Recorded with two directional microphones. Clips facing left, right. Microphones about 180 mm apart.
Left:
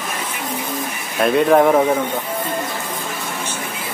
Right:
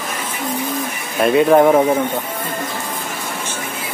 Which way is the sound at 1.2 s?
Centre (ahead or behind).